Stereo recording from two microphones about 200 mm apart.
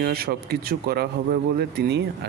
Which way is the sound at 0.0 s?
50° right (ahead or behind).